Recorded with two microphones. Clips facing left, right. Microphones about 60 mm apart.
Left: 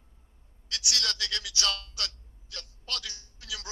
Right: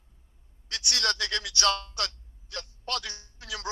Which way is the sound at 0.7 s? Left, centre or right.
Right.